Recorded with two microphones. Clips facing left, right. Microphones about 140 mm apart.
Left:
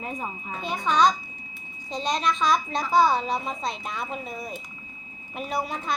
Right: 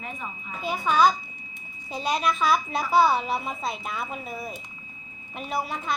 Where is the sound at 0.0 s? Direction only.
40° left (ahead or behind).